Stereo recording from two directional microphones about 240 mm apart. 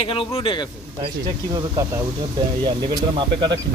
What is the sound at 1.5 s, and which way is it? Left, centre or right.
Speech, centre.